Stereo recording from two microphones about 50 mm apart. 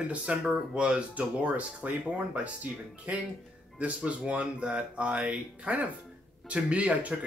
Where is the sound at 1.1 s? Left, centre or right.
Right.